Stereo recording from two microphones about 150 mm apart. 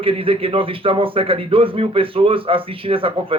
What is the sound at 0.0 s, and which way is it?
Speech, 35° right (ahead or behind).